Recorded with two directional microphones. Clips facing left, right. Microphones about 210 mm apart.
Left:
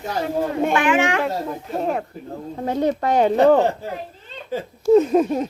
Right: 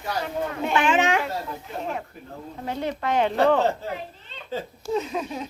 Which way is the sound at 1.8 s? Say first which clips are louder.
Left 9 dB; 55° left (ahead or behind).